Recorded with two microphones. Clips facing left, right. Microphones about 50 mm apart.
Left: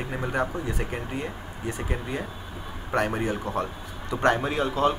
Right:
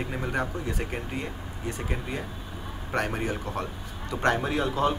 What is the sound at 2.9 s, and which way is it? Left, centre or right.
Speech, centre.